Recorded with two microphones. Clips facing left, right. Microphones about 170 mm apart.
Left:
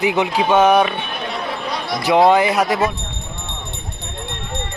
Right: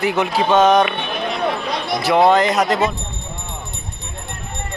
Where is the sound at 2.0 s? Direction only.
15° left (ahead or behind).